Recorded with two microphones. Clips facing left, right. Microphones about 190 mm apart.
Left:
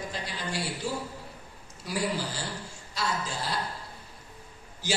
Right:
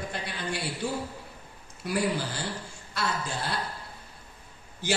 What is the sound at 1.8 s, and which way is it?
A man's voice, 60° right (ahead or behind).